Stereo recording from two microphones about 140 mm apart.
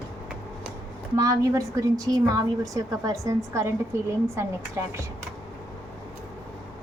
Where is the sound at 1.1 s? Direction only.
25° right (ahead or behind).